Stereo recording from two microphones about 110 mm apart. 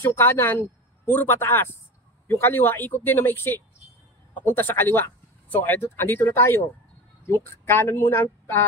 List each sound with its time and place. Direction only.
0.0 s speech: 20° left (ahead or behind)
7.6 s speech: 25° left (ahead or behind)